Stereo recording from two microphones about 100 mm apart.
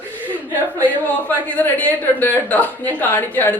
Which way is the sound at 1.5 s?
15° left (ahead or behind).